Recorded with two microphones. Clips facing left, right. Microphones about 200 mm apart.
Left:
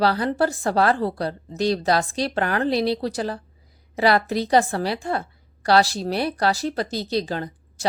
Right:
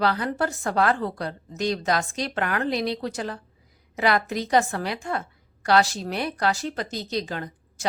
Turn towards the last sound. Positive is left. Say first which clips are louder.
# left 4 dB
turn(degrees=35)  # may be behind; listen again after turning